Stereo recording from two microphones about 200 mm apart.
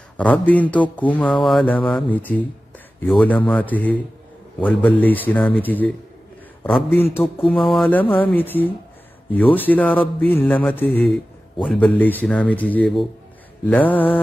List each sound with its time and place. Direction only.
0.2 s speech: 10° left (ahead or behind)
5.0 s speech: 10° left (ahead or behind)
7.3 s a sound: 25° left (ahead or behind)
8.2 s speech: 10° left (ahead or behind)